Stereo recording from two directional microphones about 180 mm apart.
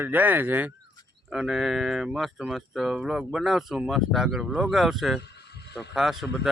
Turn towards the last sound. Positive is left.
turn(degrees=-5)  # may be behind; listen again after turning